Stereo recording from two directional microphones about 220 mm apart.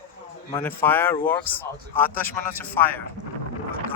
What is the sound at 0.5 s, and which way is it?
Speech, 10° left (ahead or behind).